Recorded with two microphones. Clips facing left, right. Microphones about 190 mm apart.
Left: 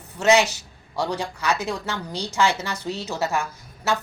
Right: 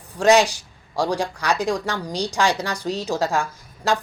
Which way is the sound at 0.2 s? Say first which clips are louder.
Right 3 dB; 15° right (ahead or behind).